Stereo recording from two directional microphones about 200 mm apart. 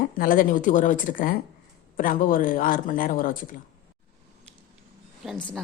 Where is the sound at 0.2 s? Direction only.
45° left (ahead or behind).